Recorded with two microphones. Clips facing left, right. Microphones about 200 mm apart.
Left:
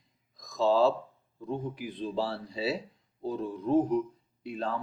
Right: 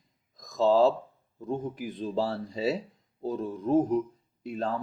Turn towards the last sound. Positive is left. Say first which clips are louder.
# right 2 dB
turn(degrees=-45)  # may be behind; listen again after turning